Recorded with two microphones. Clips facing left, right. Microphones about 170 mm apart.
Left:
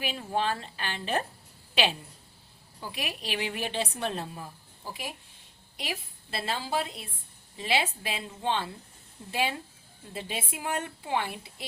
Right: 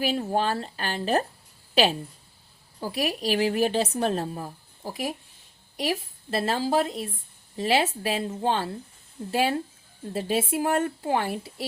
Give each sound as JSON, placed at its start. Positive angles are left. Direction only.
{"t": 0.0, "sound": "a woman's voice", "side_deg": -40}